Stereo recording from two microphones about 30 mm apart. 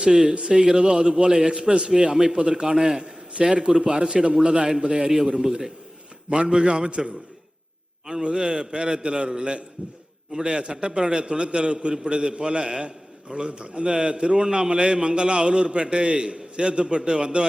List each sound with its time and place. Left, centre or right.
0.1 s a man's voice: centre
0.3 s a man's voice: right
5.0 s a man's voice: centre
6.5 s a man's voice: right